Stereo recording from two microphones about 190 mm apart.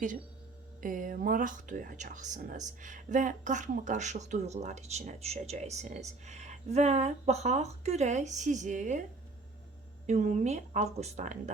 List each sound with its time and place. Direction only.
0.8 s speech: 45° right (ahead or behind)
10.1 s speech: 40° right (ahead or behind)